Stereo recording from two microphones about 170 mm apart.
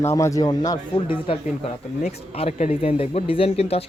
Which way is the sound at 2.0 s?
40° left (ahead or behind).